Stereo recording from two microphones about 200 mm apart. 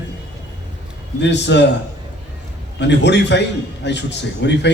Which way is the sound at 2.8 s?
60° left (ahead or behind).